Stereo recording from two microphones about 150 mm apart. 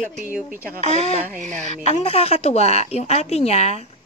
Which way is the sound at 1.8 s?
45° left (ahead or behind).